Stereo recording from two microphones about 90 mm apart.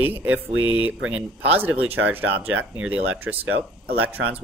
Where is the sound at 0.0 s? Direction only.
20° right (ahead or behind).